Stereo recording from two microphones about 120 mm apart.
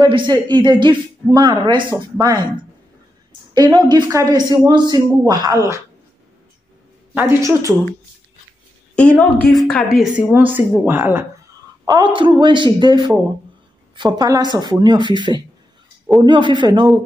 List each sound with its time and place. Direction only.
0.0 s speech: 35° right (ahead or behind)
3.7 s speech: 30° right (ahead or behind)
7.2 s speech: 20° right (ahead or behind)
8.9 s a woman's voice: 10° left (ahead or behind)
10.1 s speech: 15° right (ahead or behind)
11.8 s speech: 40° right (ahead or behind)